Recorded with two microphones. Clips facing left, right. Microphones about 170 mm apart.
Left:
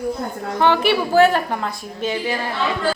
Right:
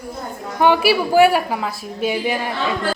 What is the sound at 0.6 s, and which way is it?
A woman's voice, 10° right (ahead or behind).